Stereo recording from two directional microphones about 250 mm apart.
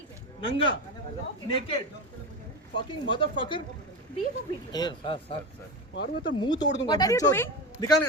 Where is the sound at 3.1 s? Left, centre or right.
Centre.